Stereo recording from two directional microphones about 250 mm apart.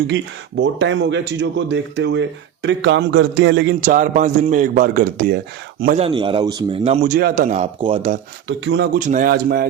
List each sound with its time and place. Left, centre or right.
0.6 s speech: right
3.8 s a man's voice: right
7.0 s a man's voice: right
8.4 s speech: right
9.0 s a man's voice: right